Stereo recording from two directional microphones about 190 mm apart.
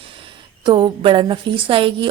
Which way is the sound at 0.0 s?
25° right (ahead or behind).